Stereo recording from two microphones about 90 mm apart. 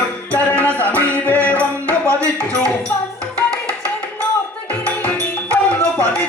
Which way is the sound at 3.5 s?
15° left (ahead or behind).